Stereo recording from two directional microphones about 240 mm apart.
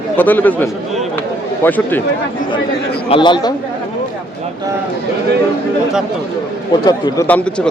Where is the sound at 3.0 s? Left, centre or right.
Left.